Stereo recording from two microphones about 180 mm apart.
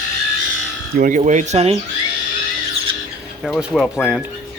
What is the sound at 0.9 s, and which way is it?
Speech, 45° right (ahead or behind).